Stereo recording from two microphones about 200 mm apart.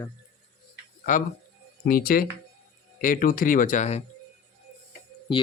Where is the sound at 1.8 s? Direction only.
45° left (ahead or behind).